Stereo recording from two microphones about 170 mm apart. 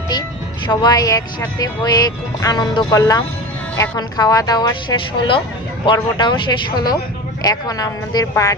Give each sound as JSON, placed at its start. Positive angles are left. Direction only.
{"t": 0.7, "sound": "speech", "side_deg": 25}